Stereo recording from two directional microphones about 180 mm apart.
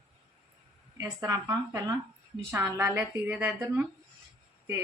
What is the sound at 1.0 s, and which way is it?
A woman's voice, 20° right (ahead or behind).